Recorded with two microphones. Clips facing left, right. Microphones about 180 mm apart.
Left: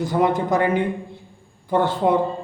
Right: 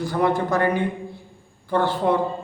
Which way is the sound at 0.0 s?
20° left (ahead or behind).